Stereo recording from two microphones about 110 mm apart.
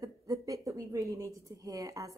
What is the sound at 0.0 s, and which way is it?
A woman's voice, 30° right (ahead or behind).